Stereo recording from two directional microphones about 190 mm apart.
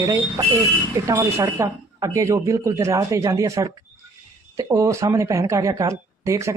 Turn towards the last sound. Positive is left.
turn(degrees=-15)  # may be behind; listen again after turning